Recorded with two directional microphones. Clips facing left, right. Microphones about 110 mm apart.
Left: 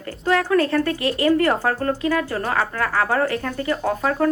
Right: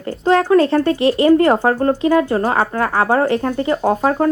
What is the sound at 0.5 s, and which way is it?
Speech, 25° right (ahead or behind).